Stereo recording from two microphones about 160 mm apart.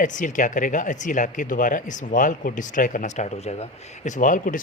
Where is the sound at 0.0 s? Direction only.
55° left (ahead or behind).